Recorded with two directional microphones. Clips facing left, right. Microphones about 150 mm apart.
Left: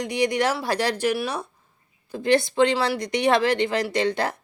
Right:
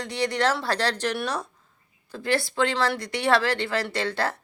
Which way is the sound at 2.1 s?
20° left (ahead or behind).